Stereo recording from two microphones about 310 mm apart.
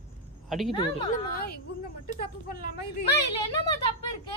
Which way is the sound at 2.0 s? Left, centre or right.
Left.